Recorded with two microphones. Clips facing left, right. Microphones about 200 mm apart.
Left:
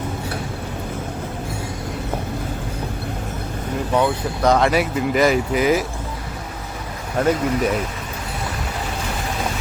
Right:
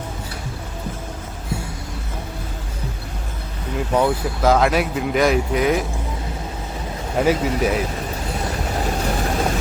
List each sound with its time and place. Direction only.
4.4 s speech: centre (ahead or behind)
7.2 s speech: 5° right (ahead or behind)